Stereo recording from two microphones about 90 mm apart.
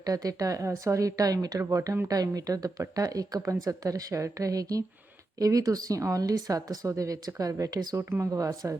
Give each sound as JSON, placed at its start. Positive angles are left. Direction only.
{"t": 0.0, "sound": "speech", "side_deg": -40}
{"t": 8.1, "sound": "speech", "side_deg": -35}